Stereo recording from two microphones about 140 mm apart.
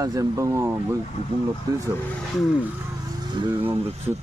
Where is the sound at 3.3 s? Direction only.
35° right (ahead or behind).